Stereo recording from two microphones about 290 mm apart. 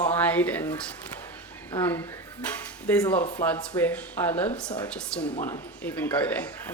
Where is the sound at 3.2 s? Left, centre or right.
Left.